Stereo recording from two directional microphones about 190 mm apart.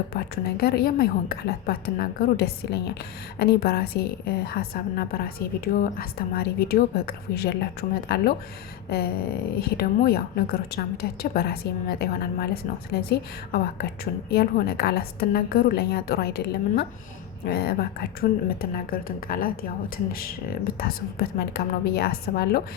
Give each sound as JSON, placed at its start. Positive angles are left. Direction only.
{"t": 0.1, "sound": "a woman's voice", "side_deg": 55}
{"t": 9.6, "sound": "a woman's voice", "side_deg": 55}
{"t": 20.7, "sound": "a woman's voice", "side_deg": 55}